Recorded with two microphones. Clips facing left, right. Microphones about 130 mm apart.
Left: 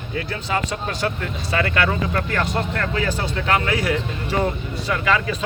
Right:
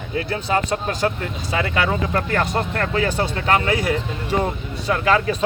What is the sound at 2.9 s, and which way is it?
Speech, 50° right (ahead or behind).